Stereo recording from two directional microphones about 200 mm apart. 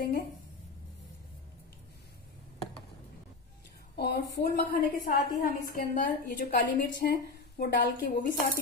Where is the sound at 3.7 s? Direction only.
50° left (ahead or behind).